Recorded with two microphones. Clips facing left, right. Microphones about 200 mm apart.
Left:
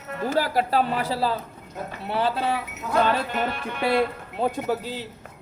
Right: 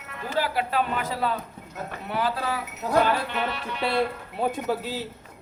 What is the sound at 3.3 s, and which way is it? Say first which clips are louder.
Speech: left 2 dB; 45° left (ahead or behind).